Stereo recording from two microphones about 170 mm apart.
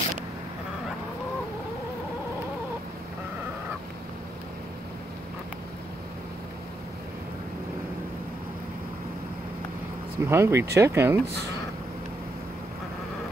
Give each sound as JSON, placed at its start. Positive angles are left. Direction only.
{"t": 10.1, "sound": "speech", "side_deg": -15}